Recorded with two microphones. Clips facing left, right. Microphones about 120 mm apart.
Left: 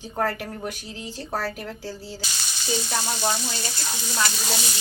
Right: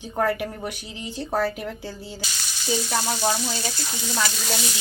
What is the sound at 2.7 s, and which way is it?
Frying, 5° right (ahead or behind).